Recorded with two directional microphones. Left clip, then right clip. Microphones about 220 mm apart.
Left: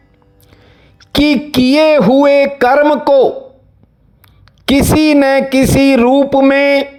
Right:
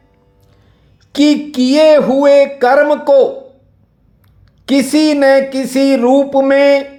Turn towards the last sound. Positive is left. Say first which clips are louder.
# even
turn(degrees=25)  # may be behind; listen again after turning